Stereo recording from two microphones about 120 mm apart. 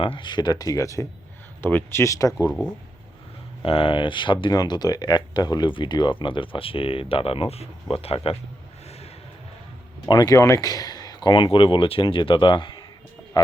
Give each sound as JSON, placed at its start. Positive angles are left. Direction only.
{"t": 0.0, "sound": "speech", "side_deg": 45}
{"t": 3.6, "sound": "speech", "side_deg": 50}
{"t": 10.1, "sound": "speech", "side_deg": 35}